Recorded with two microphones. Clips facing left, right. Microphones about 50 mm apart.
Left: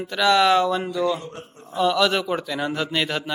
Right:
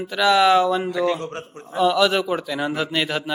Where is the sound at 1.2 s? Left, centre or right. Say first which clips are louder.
Right 6 dB; right.